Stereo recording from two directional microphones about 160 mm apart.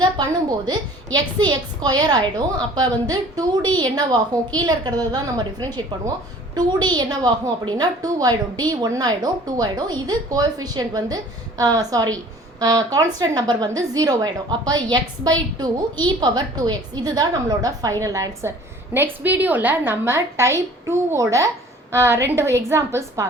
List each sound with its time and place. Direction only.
0.0 s a woman's voice: 25° right (ahead or behind)